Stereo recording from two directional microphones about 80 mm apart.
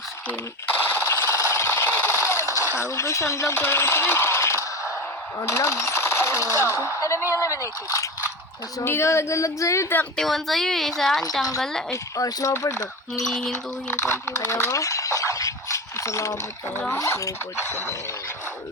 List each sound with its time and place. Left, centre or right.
0.9 s a sound: left
2.7 s speech: left
10.2 s a woman's voice: centre
11.5 s music: centre
11.9 s speech: left
13.2 s music: centre
13.8 s a sound: left
17.0 s speech: left